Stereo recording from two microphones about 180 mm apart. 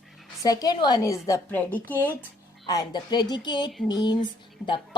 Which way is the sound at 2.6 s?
20° left (ahead or behind).